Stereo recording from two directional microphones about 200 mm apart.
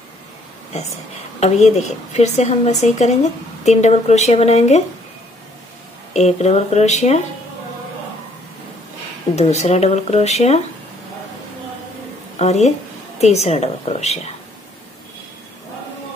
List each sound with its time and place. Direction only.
0.7 s a woman's voice: 35° left (ahead or behind)
6.1 s a woman's voice: 35° left (ahead or behind)
9.3 s a woman's voice: 35° left (ahead or behind)
12.4 s a woman's voice: 35° left (ahead or behind)